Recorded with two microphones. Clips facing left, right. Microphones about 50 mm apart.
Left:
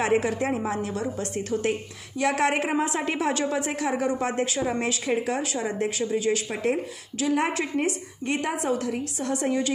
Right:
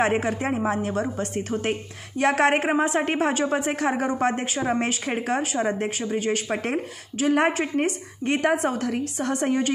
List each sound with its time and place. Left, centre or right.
0.0 s a woman's voice: right
4.1 s a woman's voice: right